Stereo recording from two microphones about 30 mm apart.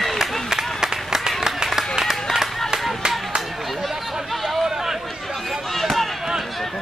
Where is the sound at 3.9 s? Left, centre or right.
Centre.